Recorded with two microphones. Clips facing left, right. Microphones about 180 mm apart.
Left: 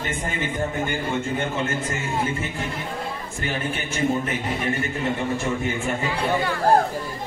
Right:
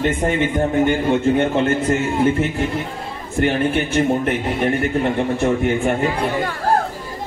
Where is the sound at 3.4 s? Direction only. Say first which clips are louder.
Right 11 dB; 65° right (ahead or behind).